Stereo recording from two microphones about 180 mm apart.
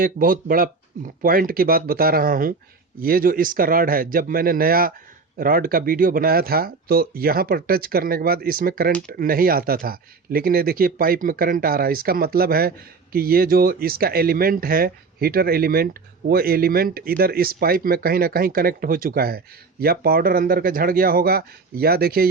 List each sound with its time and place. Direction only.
0.0 s speech: 50° right (ahead or behind)